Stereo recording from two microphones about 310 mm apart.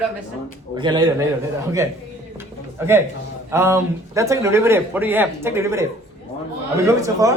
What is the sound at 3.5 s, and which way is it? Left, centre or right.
A man's voice, centre.